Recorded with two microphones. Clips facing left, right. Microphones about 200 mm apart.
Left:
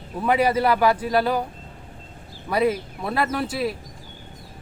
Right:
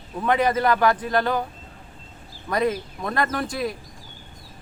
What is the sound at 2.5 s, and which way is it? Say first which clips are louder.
A man's voice: left 2 dB; 5° left (ahead or behind).